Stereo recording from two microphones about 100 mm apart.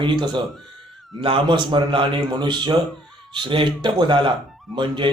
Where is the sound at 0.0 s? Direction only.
55° right (ahead or behind).